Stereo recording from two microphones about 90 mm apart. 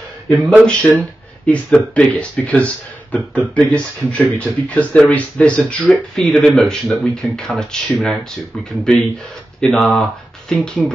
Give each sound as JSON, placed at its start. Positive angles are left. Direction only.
{"t": 0.3, "sound": "speech", "side_deg": 10}
{"t": 5.9, "sound": "speech", "side_deg": 0}
{"t": 9.6, "sound": "speech", "side_deg": 5}